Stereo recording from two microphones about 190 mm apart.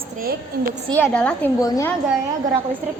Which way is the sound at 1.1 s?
5° left (ahead or behind).